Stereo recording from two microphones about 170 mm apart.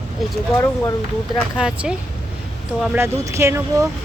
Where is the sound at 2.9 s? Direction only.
15° right (ahead or behind).